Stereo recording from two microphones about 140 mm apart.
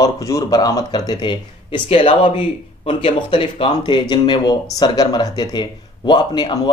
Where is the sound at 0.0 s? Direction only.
25° left (ahead or behind).